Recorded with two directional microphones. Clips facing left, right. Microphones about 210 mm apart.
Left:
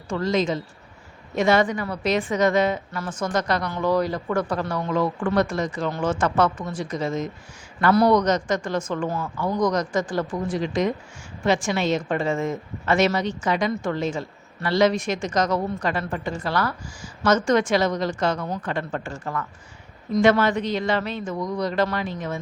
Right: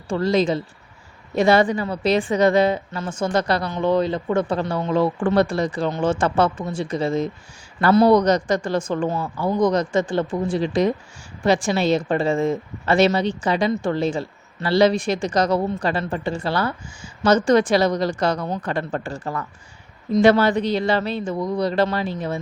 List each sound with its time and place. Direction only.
0.1 s a woman's voice: 35° right (ahead or behind)